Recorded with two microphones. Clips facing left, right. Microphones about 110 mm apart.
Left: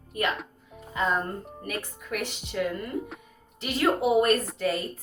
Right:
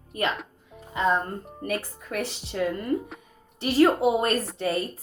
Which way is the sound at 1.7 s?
30° right (ahead or behind).